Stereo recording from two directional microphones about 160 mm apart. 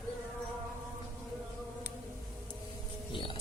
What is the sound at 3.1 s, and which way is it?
Music, 30° left (ahead or behind).